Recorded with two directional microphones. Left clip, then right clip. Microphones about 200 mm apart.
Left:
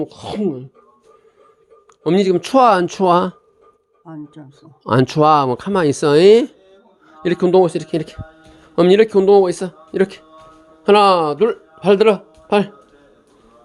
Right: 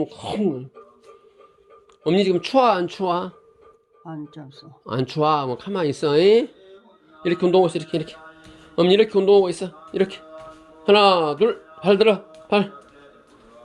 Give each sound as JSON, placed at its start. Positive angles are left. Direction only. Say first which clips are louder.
{"t": 0.0, "sound": "speech", "louder": "left 2 dB", "side_deg": 25}
{"t": 2.0, "sound": "speech", "louder": "left 4 dB", "side_deg": 35}
{"t": 4.0, "sound": "speech", "louder": "left 1 dB", "side_deg": 5}
{"t": 4.8, "sound": "speech", "louder": "left 8 dB", "side_deg": 45}